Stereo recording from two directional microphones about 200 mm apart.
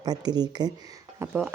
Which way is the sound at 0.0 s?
20° right (ahead or behind).